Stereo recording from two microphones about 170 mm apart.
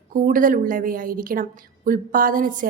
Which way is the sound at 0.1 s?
55° right (ahead or behind).